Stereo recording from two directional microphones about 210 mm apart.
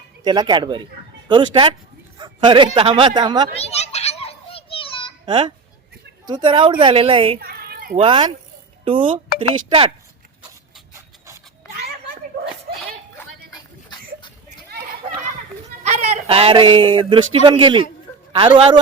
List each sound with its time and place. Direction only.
0.3 s a man's voice: 20° right (ahead or behind)
3.5 s children playing: 30° left (ahead or behind)
5.2 s a child's voice: 20° right (ahead or behind)
7.3 s cat: 45° right (ahead or behind)
7.9 s a man's voice: 25° right (ahead or behind)
13.9 s a sound: 20° left (ahead or behind)
16.0 s a man's voice: 30° right (ahead or behind)